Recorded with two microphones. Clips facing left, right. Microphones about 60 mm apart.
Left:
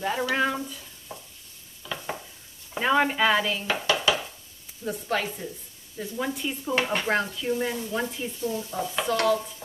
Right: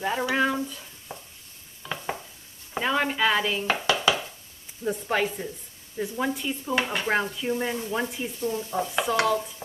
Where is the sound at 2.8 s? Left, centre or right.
Centre.